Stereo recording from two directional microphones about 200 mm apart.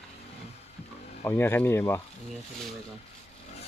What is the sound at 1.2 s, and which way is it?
Speech, 10° left (ahead or behind).